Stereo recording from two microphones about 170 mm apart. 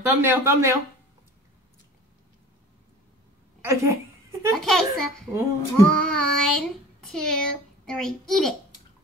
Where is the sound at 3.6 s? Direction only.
15° right (ahead or behind).